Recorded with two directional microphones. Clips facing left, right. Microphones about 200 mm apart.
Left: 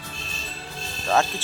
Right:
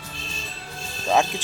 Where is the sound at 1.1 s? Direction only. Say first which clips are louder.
Right 1 dB; 15° right (ahead or behind).